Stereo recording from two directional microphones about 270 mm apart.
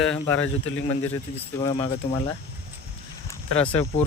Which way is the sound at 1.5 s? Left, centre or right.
Centre.